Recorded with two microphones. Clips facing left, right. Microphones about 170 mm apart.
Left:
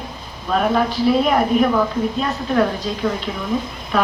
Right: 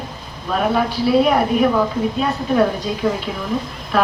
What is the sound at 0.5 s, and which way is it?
A woman's voice, 5° right (ahead or behind).